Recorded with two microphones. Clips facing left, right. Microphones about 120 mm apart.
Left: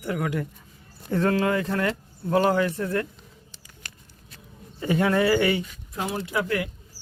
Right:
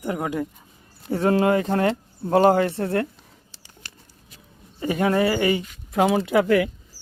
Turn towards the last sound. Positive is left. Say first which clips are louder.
# right 8 dB
turn(degrees=-90)